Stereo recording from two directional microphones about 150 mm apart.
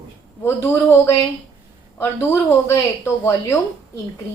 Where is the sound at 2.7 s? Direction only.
20° left (ahead or behind).